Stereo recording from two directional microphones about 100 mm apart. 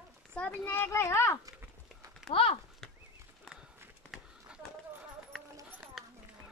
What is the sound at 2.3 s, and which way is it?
Speech, 70° left (ahead or behind).